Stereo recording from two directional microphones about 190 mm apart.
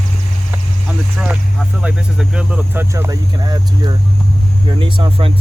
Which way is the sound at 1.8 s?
5° right (ahead or behind).